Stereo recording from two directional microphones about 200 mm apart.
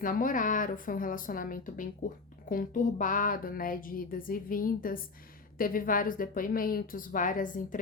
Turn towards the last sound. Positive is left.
turn(degrees=40)  # may be behind; listen again after turning